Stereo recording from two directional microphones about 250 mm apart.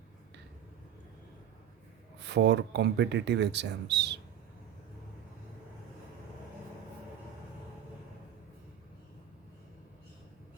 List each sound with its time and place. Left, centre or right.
2.1 s speech: right